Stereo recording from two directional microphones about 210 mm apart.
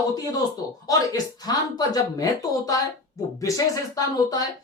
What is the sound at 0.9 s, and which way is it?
Speech, 20° left (ahead or behind).